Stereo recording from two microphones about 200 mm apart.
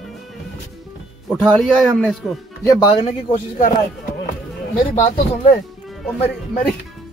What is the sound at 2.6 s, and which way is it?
Speech, 20° left (ahead or behind).